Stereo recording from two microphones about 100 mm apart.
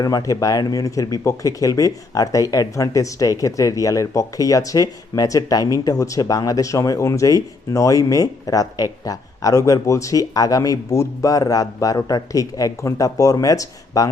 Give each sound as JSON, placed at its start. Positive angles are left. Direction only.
{"t": 0.0, "sound": "speech", "side_deg": 35}